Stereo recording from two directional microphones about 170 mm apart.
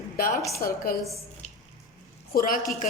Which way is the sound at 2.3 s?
55° left (ahead or behind).